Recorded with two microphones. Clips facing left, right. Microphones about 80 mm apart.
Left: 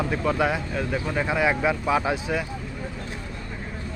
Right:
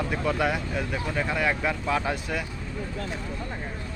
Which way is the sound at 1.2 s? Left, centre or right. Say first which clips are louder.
Left 4 dB; centre.